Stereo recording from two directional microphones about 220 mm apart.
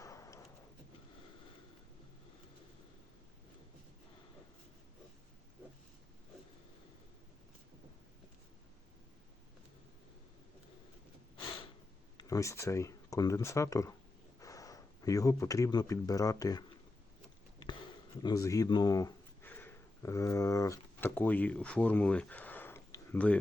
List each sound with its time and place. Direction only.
0.0 s a sound: 15° left (ahead or behind)
12.1 s speech: 15° left (ahead or behind)
18.2 s speech: 15° left (ahead or behind)